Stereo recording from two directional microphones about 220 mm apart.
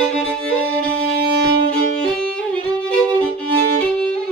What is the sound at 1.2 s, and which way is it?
Violin, 50° right (ahead or behind).